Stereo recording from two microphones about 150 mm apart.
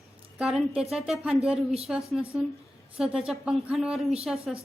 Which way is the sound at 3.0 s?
5° right (ahead or behind).